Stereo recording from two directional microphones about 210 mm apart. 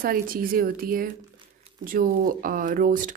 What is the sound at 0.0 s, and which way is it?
Speech, 45° right (ahead or behind).